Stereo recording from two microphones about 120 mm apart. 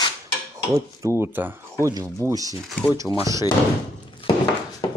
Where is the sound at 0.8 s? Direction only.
20° right (ahead or behind).